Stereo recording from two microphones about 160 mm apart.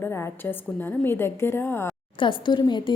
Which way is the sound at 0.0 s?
15° left (ahead or behind).